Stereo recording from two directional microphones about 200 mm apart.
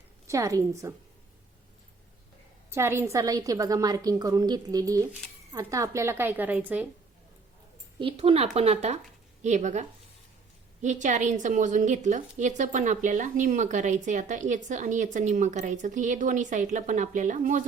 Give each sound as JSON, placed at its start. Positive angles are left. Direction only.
{"t": 0.3, "sound": "a woman's voice", "side_deg": -15}
{"t": 2.6, "sound": "a woman's voice", "side_deg": -10}
{"t": 7.9, "sound": "a woman's voice", "side_deg": -30}
{"t": 10.8, "sound": "a woman's voice", "side_deg": -40}